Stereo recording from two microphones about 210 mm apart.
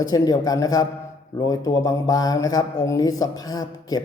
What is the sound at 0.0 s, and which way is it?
Speech, 15° left (ahead or behind).